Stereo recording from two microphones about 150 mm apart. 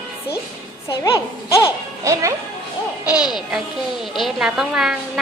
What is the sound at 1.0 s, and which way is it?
Speech, 20° left (ahead or behind).